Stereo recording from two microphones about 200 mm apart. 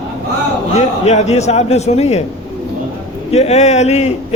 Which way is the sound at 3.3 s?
35° left (ahead or behind).